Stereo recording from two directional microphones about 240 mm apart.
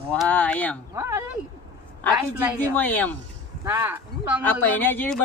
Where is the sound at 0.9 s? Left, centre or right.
Centre.